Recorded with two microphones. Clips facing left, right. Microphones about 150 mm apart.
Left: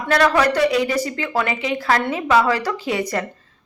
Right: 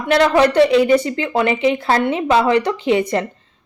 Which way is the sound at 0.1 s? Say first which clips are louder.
Right 3 dB; 25° right (ahead or behind).